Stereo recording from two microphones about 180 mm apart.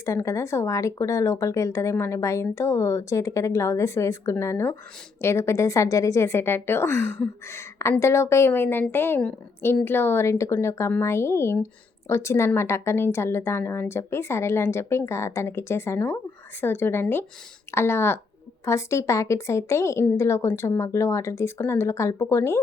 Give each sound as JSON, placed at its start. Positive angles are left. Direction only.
{"t": 0.0, "sound": "speech", "side_deg": 15}